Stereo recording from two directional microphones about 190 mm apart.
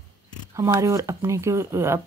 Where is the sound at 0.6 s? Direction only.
15° right (ahead or behind).